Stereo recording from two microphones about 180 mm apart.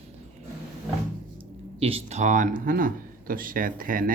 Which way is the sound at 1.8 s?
35° right (ahead or behind).